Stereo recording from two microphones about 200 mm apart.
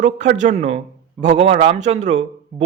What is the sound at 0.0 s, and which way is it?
A man's voice, 40° right (ahead or behind).